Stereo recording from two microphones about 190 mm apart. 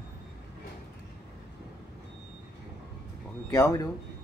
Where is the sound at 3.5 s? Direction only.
15° left (ahead or behind).